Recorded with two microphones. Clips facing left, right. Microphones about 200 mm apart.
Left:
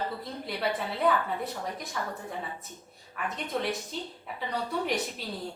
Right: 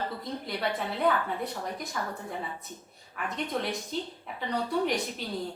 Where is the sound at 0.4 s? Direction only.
5° left (ahead or behind).